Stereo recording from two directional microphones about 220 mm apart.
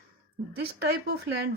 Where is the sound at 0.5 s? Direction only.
50° right (ahead or behind).